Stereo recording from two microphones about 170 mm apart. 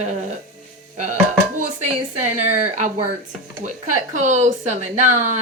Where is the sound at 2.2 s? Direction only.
40° right (ahead or behind).